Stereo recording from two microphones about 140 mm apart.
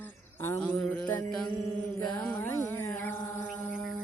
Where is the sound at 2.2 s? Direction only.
15° left (ahead or behind).